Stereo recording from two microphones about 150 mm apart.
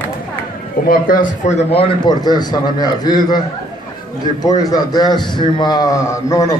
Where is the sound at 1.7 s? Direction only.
40° left (ahead or behind).